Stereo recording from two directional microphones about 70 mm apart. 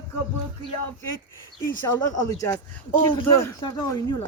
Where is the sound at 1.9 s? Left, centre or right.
Left.